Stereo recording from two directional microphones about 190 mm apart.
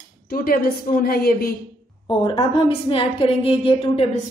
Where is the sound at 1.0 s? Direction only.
50° left (ahead or behind).